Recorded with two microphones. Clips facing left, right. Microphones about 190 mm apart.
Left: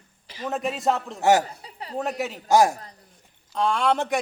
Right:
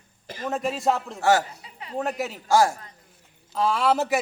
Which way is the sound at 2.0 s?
Centre (ahead or behind).